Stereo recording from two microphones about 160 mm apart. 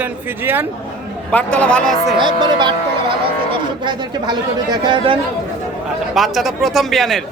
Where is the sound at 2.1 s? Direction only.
30° right (ahead or behind).